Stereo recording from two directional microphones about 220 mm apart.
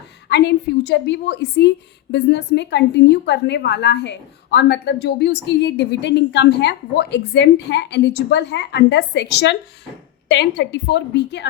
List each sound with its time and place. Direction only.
0.3 s a woman's voice: 50° left (ahead or behind)